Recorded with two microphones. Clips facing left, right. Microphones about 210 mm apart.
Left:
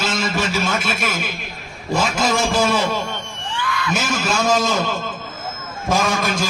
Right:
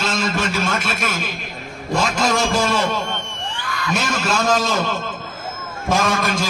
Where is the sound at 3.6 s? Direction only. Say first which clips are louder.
Left 5 dB; 45° right (ahead or behind).